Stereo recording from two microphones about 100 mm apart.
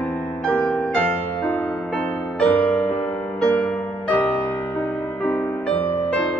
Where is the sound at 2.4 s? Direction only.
15° left (ahead or behind).